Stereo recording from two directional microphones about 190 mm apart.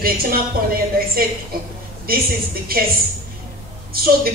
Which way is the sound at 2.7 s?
50° right (ahead or behind).